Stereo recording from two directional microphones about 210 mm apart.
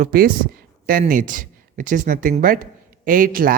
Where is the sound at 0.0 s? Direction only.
45° right (ahead or behind).